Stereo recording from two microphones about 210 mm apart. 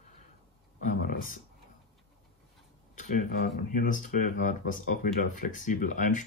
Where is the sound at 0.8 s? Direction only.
40° left (ahead or behind).